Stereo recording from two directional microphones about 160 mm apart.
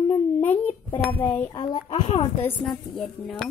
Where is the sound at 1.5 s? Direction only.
25° left (ahead or behind).